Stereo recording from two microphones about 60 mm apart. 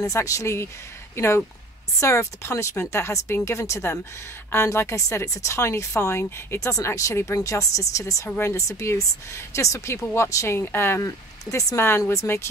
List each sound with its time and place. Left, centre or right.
0.0 s a woman's voice: left
7.0 s speech: left
10.1 s a woman's voice: left
11.1 s a woman's voice: left
12.0 s speech: left